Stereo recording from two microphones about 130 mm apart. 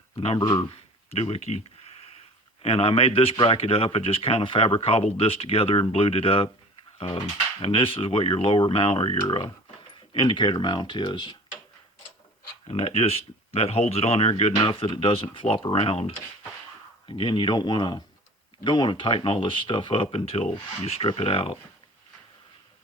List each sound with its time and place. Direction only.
0.3 s speech: 35° left (ahead or behind); by 1.6 s 60° left (ahead or behind)
2.6 s speech: 45° left (ahead or behind)
7.6 s speech: 45° left (ahead or behind)
12.6 s speech: 50° left (ahead or behind)